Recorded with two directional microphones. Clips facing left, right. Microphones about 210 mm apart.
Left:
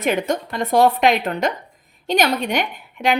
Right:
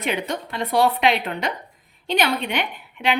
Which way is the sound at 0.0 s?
45° left (ahead or behind).